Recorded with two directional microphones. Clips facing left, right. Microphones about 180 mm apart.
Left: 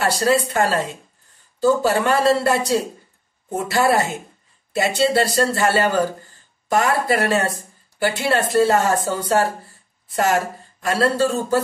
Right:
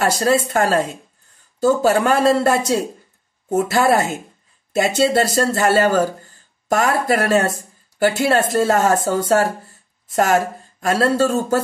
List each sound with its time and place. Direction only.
0.0 s speech: 45° right (ahead or behind)